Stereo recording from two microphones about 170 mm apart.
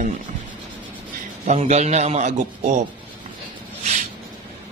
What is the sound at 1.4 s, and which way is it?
A man's voice, 40° right (ahead or behind).